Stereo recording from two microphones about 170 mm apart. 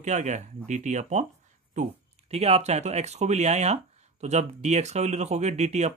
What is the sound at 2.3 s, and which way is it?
Speech, 40° right (ahead or behind).